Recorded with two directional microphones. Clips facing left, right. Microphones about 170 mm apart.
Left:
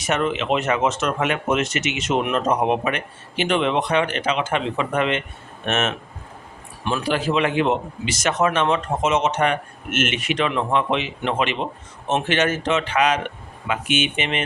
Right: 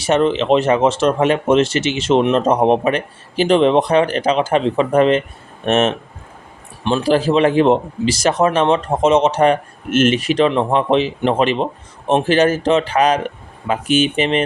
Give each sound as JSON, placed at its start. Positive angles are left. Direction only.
{"t": 0.0, "sound": "a man's voice", "side_deg": -30}